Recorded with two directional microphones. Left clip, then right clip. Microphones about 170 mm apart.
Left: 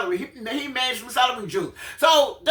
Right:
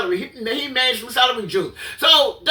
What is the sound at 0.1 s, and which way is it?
Speech, 25° left (ahead or behind).